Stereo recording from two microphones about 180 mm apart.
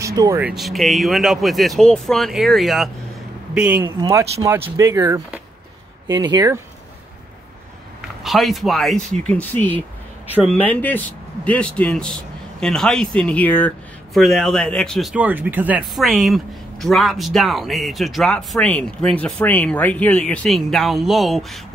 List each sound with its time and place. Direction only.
0.0 s a sound: 20° right (ahead or behind)
0.4 s speech: 5° right (ahead or behind)
4.0 s speech: 15° right (ahead or behind)
8.2 s a man's voice: centre (ahead or behind)